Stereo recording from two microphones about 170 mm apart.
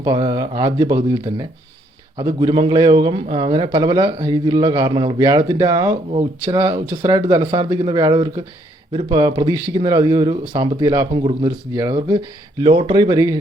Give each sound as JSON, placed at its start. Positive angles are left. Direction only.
{"t": 0.0, "sound": "a man's voice", "side_deg": -25}